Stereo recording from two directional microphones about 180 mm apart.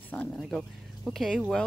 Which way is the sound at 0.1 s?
5° left (ahead or behind).